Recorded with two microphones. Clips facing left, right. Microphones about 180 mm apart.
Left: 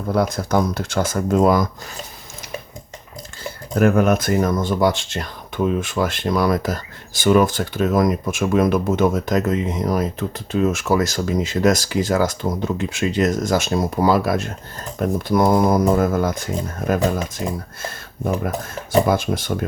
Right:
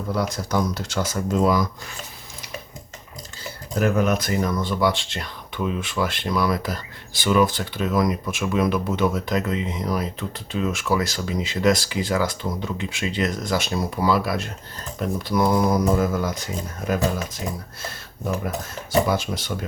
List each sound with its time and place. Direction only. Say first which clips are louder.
0.1 s speech: left 6 dB; 55° left (ahead or behind)
3.8 s speech: left 5 dB; 50° left (ahead or behind)
18.4 s speech: left 4 dB; 50° left (ahead or behind)